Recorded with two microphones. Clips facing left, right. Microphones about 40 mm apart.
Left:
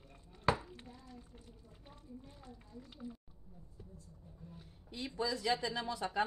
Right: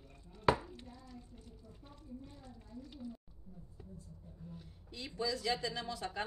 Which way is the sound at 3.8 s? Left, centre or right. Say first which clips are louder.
Right 3 dB; centre.